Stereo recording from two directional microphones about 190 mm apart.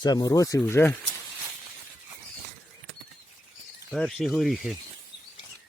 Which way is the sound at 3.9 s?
Centre (ahead or behind).